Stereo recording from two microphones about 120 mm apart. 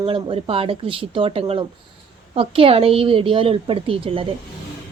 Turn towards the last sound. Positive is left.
turn(degrees=-50)  # may be behind; listen again after turning